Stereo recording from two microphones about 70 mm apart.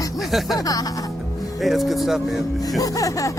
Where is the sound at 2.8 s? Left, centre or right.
Left.